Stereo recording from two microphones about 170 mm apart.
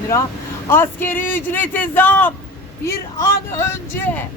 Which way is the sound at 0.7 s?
15° left (ahead or behind).